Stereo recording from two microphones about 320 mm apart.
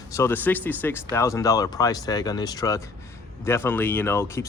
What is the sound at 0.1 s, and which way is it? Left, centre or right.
Speech, centre.